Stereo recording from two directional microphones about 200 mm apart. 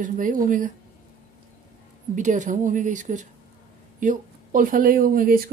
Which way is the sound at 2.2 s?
40° right (ahead or behind).